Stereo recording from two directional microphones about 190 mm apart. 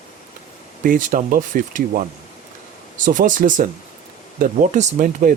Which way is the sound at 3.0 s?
45° right (ahead or behind).